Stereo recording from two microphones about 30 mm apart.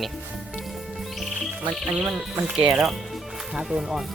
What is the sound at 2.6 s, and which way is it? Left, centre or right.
Speech, right.